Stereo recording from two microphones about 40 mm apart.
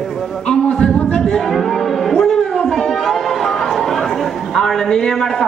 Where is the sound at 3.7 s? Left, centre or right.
Centre.